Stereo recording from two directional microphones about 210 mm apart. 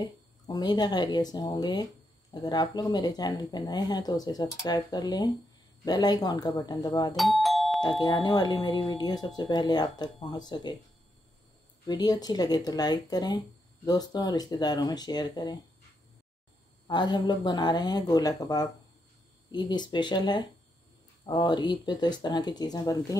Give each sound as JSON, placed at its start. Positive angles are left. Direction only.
{"t": 0.5, "sound": "speech", "side_deg": 20}
{"t": 7.2, "sound": "doorbell", "side_deg": 0}
{"t": 8.0, "sound": "speech", "side_deg": 20}
{"t": 11.9, "sound": "speech", "side_deg": 20}
{"t": 16.8, "sound": "speech", "side_deg": 20}